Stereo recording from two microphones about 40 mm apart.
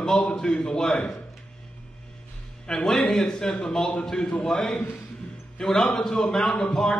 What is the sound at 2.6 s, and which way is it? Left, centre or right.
A man's voice, centre.